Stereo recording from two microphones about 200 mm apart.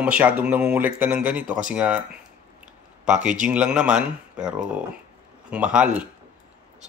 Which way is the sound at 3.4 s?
5° right (ahead or behind).